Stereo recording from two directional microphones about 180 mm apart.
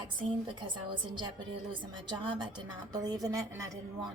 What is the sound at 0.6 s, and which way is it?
A woman's voice, 25° right (ahead or behind).